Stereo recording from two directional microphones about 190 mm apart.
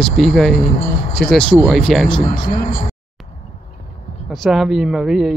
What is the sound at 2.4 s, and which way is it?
Speech, 25° left (ahead or behind).